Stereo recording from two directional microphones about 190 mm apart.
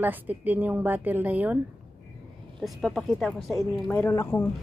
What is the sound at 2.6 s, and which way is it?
A woman's voice, centre (ahead or behind).